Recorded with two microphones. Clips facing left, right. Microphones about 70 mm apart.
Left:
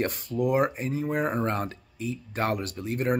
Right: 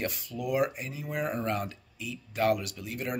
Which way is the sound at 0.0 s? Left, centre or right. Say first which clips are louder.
Left 7 dB; left.